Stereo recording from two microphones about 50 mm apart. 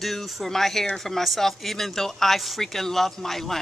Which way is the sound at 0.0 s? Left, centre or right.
Centre.